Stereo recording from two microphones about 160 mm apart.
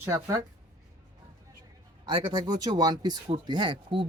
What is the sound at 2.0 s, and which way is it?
Speech, 25° right (ahead or behind).